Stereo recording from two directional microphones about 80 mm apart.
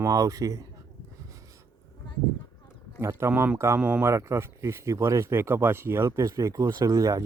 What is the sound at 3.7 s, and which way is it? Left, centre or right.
Speech, centre.